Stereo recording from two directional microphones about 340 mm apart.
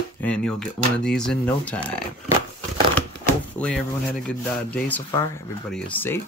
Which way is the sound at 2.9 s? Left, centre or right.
Centre.